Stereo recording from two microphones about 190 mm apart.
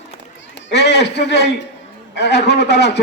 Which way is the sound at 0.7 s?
60° left (ahead or behind).